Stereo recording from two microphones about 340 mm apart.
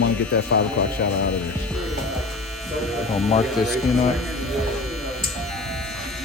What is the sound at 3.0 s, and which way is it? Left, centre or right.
Speech, centre.